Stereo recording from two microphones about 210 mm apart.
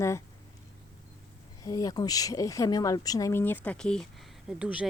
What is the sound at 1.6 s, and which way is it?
Speech, 15° left (ahead or behind).